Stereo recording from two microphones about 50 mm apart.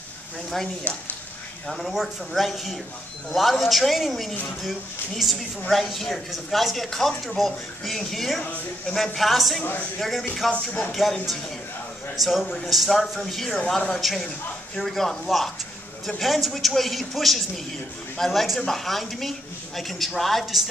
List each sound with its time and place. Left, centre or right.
0.9 s speech: left
1.7 s speech: centre
12.2 s speech: centre